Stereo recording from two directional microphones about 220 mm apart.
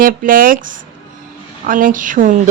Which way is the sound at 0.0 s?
40° right (ahead or behind).